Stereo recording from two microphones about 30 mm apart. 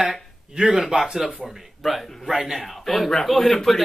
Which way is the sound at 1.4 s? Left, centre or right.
Centre.